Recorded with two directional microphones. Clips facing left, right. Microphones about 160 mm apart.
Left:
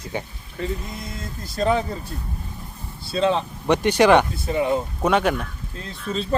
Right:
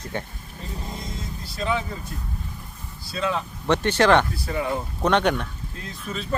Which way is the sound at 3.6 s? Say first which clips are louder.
Left 3 dB; 15° left (ahead or behind).